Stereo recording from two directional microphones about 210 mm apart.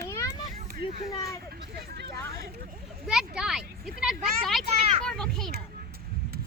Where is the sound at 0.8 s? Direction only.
25° left (ahead or behind).